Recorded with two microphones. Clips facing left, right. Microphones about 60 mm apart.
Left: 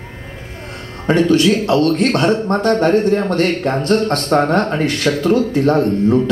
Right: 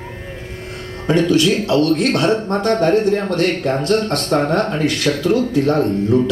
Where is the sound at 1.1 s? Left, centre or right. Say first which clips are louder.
Left 2 dB; left.